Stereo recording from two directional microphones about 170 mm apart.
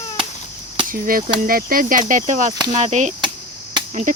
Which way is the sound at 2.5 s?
25° right (ahead or behind).